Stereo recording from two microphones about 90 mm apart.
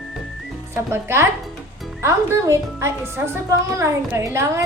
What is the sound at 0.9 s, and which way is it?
A woman's voice, 30° right (ahead or behind).